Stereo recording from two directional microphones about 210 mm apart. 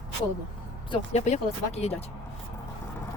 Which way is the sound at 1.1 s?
30° left (ahead or behind).